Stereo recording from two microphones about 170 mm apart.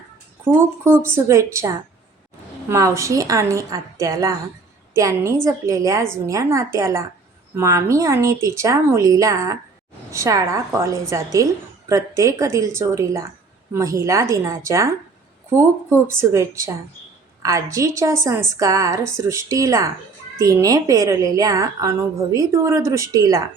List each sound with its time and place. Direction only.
0.5 s a woman's voice: 15° right (ahead or behind)